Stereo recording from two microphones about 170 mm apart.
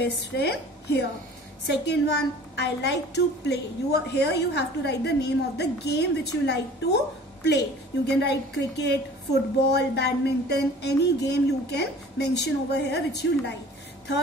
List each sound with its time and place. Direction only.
0.0 s a woman's voice: 75° left (ahead or behind)
3.4 s a woman's voice: 75° left (ahead or behind)
8.1 s a woman's voice: 80° left